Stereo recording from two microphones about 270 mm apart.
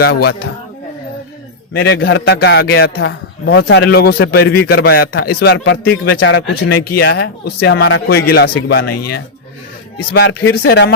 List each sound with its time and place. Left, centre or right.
0.0 s a man's voice: left
1.7 s a man's voice: left